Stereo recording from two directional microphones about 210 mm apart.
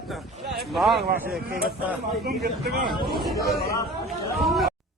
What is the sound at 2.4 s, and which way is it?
Speech, 50° right (ahead or behind).